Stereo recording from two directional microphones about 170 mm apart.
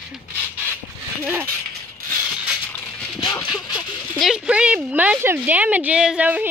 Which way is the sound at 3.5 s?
5° right (ahead or behind).